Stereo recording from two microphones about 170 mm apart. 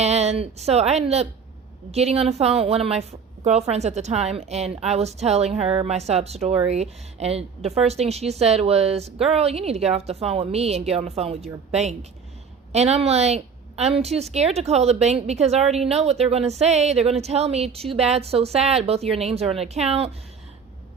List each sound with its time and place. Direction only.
0.0 s a woman's voice: 40° right (ahead or behind)